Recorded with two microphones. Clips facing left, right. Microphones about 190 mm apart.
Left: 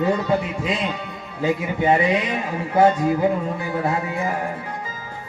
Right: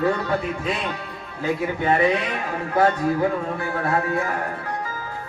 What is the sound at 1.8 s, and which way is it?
Speech, 15° left (ahead or behind).